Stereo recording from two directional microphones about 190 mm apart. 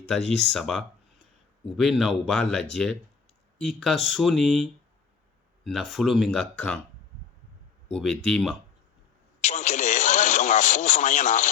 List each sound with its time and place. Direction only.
0.5 s speech: centre (ahead or behind)
7.9 s speech: 5° left (ahead or behind)
9.4 s radio: 35° left (ahead or behind)